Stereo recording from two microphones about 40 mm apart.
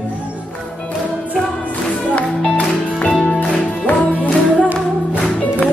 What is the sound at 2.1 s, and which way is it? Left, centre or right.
Music, left.